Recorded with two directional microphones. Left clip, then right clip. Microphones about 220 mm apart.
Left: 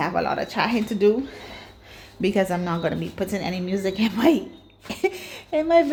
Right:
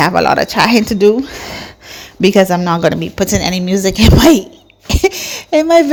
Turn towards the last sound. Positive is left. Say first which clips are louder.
# right 9 dB
turn(degrees=-35)  # may be behind; listen again after turning